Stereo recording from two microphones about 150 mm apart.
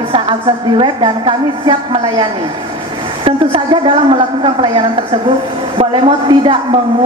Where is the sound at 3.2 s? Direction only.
35° right (ahead or behind).